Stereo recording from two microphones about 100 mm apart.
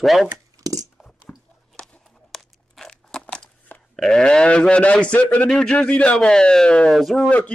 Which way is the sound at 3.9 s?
5° left (ahead or behind).